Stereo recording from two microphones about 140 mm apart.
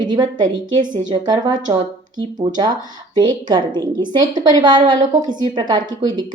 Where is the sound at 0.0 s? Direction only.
30° right (ahead or behind).